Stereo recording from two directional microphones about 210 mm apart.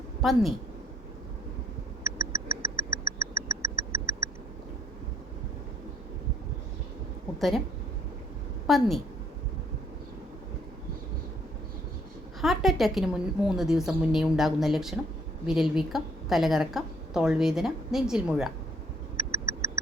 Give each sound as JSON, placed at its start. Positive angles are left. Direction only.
{"t": 0.2, "sound": "a woman's voice", "side_deg": 0}
{"t": 2.1, "sound": "a sound", "side_deg": -15}
{"t": 7.3, "sound": "speech", "side_deg": 0}
{"t": 8.6, "sound": "a woman's voice", "side_deg": 0}
{"t": 12.4, "sound": "a woman's voice", "side_deg": 0}
{"t": 19.1, "sound": "a sound", "side_deg": -15}